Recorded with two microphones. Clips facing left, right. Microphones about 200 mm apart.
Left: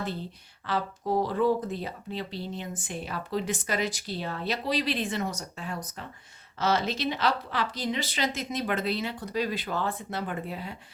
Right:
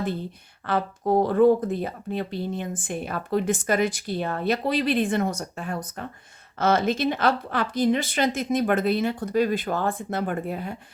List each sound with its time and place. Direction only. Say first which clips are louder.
0.6 s speech: right 5 dB; 55° right (ahead or behind)